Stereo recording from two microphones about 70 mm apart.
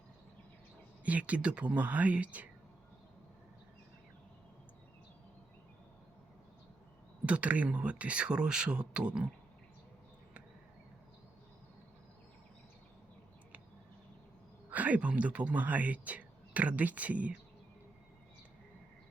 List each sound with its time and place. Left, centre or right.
1.0 s speech: right
7.3 s speech: centre
14.7 s speech: right